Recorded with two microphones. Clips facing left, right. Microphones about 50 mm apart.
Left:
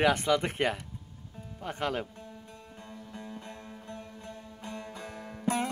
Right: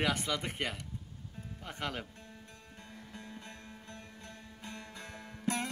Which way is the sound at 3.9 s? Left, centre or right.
Centre.